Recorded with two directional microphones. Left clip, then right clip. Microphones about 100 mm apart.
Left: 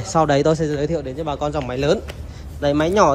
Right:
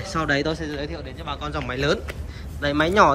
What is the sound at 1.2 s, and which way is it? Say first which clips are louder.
Speech: left 5 dB; 90° left.